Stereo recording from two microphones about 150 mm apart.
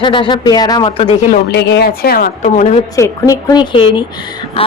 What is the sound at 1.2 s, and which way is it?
A woman's voice, 90° left.